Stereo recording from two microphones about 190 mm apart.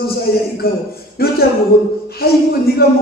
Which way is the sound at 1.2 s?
55° left (ahead or behind).